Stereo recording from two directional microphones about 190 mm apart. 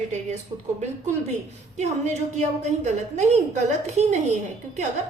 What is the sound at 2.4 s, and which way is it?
A woman's voice, 35° right (ahead or behind).